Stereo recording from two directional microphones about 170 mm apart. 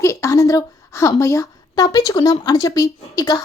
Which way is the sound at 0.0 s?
15° left (ahead or behind).